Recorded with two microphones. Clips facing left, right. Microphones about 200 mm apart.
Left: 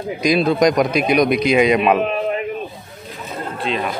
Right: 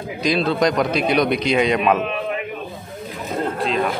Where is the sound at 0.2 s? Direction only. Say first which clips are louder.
Left 3 dB; 10° left (ahead or behind).